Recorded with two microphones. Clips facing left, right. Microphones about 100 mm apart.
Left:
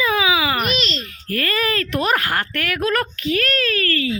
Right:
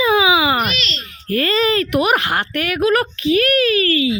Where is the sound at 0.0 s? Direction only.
20° right (ahead or behind).